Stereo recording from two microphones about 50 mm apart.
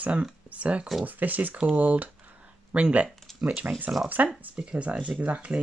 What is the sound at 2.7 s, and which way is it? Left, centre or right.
Speech, right.